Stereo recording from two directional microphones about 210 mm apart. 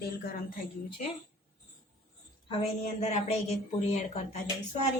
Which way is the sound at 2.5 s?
30° left (ahead or behind).